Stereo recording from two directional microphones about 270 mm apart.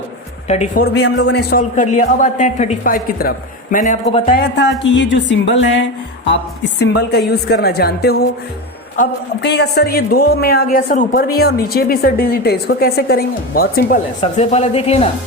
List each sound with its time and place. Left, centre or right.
0.4 s a woman's voice: left